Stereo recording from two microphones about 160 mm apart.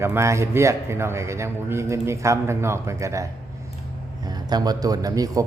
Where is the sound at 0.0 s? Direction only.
15° right (ahead or behind).